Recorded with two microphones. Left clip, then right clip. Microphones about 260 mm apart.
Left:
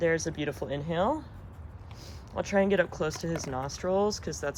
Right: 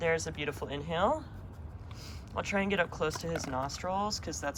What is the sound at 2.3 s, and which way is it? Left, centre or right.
Speech, left.